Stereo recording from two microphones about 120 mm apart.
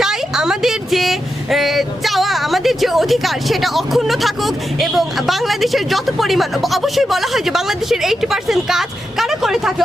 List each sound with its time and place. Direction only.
0.0 s speech: 5° right (ahead or behind)